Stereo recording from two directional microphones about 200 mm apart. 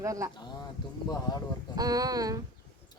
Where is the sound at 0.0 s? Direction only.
15° right (ahead or behind).